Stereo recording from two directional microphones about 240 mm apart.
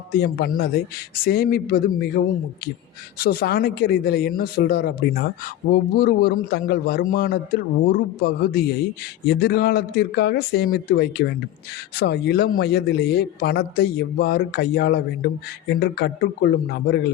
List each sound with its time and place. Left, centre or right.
0.1 s speech: left